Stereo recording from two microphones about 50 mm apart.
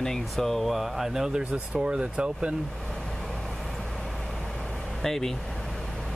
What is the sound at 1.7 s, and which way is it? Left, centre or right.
Speech, right.